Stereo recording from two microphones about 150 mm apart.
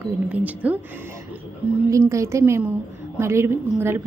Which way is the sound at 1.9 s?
20° right (ahead or behind).